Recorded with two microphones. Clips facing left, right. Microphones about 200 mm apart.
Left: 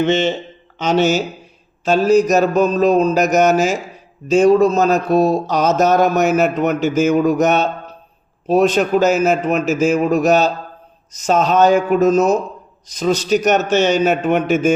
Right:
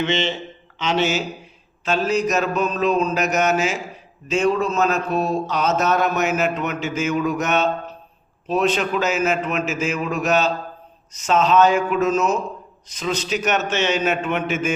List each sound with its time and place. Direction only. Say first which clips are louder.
0.0 s speech: left 6 dB; 45° left (ahead or behind)
1.8 s mantra: left 8 dB; 40° left (ahead or behind)